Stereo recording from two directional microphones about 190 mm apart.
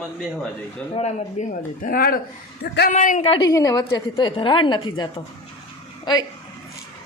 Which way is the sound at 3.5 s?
20° left (ahead or behind).